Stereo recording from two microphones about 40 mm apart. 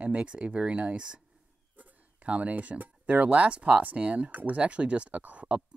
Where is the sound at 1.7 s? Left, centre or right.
Right.